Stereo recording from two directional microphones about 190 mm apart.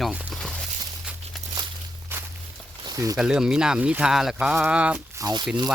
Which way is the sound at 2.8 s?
20° right (ahead or behind).